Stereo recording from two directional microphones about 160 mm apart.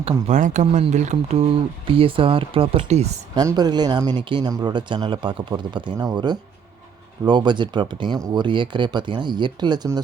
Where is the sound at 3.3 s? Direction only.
25° right (ahead or behind).